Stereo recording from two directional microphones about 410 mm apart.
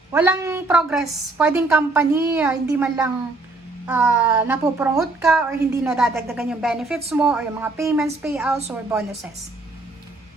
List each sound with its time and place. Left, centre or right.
0.1 s a woman's voice: centre